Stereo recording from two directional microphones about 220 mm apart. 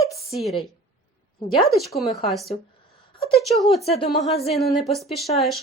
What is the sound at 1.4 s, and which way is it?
Speech, 20° left (ahead or behind).